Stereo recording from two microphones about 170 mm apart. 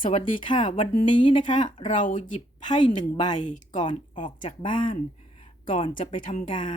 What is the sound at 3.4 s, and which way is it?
Speech, 45° left (ahead or behind).